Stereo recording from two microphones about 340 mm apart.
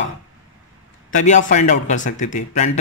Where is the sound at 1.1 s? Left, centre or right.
Left.